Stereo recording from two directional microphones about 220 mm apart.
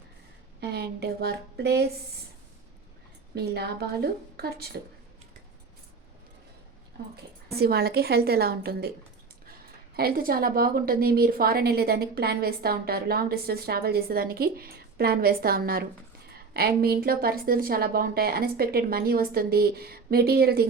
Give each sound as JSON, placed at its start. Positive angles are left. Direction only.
{"t": 0.6, "sound": "a woman's voice", "side_deg": -45}
{"t": 3.3, "sound": "a woman's voice", "side_deg": -45}
{"t": 7.5, "sound": "a woman's voice", "side_deg": -45}